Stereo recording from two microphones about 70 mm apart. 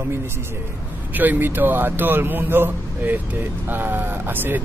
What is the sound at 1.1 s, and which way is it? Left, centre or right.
A man's voice, right.